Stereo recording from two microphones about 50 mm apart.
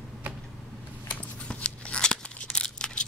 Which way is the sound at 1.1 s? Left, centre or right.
Left.